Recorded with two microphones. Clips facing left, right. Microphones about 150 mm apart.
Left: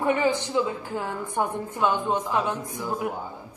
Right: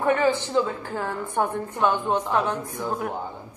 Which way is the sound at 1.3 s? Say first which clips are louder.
Right 2 dB; 10° left (ahead or behind).